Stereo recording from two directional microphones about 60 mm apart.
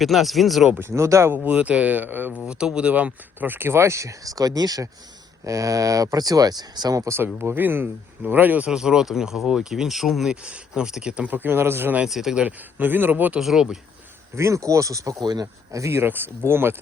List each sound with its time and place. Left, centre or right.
0.0 s speech: centre
0.8 s speech: right
1.5 s speech: right
2.5 s speech: centre; by 4.9 s right
5.5 s speech: right
7.3 s speech: right
8.6 s speech: centre
10.4 s speech: centre
11.2 s speech: right
12.0 s speech: centre
12.8 s speech: right
13.4 s speech: centre
14.3 s speech: right
15.9 s speech: right